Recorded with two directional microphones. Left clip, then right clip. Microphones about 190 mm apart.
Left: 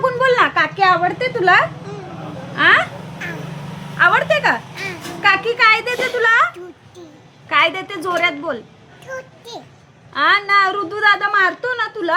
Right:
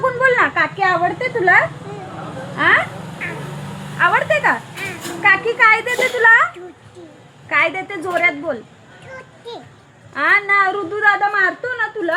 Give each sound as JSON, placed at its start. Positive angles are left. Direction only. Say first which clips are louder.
{"t": 0.0, "sound": "a sound", "louder": "even", "side_deg": 5}
{"t": 2.6, "sound": "a woman's voice", "louder": "left 2 dB", "side_deg": 10}
{"t": 3.9, "sound": "a woman's voice", "louder": "left 1 dB", "side_deg": 5}
{"t": 7.5, "sound": "a woman's voice", "louder": "left 1 dB", "side_deg": 10}
{"t": 9.1, "sound": "children playing", "louder": "left 6 dB", "side_deg": 30}
{"t": 10.2, "sound": "a woman's voice", "louder": "left 1 dB", "side_deg": 0}